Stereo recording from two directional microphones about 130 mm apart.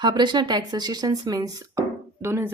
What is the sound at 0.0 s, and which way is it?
A woman's voice, 35° right (ahead or behind).